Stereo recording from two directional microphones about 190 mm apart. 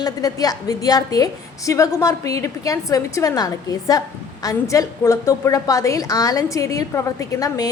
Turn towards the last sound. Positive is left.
turn(degrees=20)  # may be behind; listen again after turning